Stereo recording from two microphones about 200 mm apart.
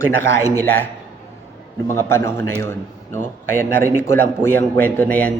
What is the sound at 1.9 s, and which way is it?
A man's voice, 15° left (ahead or behind).